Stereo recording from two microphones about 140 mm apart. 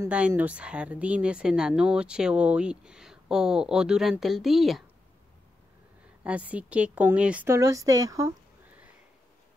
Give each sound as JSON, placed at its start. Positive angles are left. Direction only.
{"t": 0.0, "sound": "a woman's voice", "side_deg": -15}
{"t": 6.2, "sound": "speech", "side_deg": -10}
{"t": 7.4, "sound": "speech", "side_deg": -20}